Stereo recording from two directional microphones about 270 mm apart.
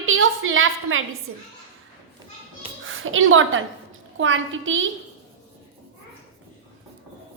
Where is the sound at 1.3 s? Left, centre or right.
Right.